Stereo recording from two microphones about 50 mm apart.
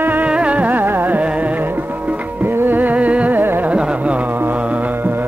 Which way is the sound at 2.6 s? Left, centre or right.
Right.